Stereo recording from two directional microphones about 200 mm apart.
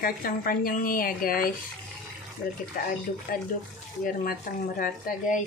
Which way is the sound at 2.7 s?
45° left (ahead or behind).